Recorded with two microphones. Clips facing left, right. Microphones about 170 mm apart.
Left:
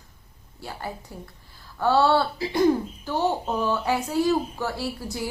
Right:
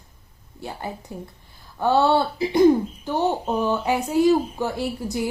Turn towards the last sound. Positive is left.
turn(degrees=-20)  # may be behind; listen again after turning